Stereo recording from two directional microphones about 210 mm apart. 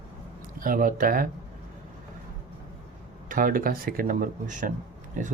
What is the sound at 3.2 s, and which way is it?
Speech, 40° right (ahead or behind).